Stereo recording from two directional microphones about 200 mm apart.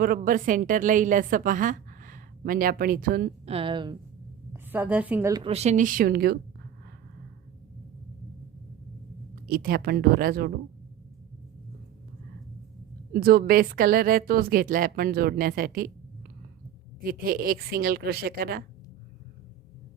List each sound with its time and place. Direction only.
0.0 s a woman's voice: 45° right (ahead or behind)
3.4 s speech: 30° right (ahead or behind)
4.5 s a woman's voice: 10° right (ahead or behind)
5.3 s speech: 25° right (ahead or behind); by 6.4 s 50° right (ahead or behind)
9.3 s a woman's voice: 45° right (ahead or behind)
13.1 s a woman's voice: 45° right (ahead or behind)
17.0 s a woman's voice: 45° right (ahead or behind)